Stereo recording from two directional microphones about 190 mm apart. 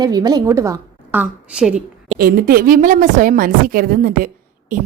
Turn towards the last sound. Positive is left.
turn(degrees=-45)  # may be behind; listen again after turning